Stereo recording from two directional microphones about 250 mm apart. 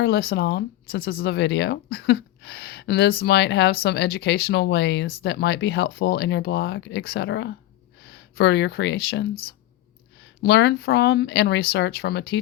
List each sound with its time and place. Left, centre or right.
0.0 s speech: left
10.4 s speech: left